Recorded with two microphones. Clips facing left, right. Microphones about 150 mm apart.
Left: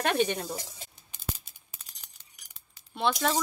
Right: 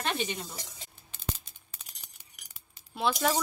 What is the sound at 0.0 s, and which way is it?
Speech, 55° left (ahead or behind).